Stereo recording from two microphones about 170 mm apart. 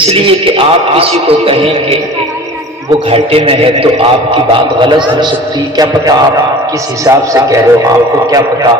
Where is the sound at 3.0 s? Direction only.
35° right (ahead or behind).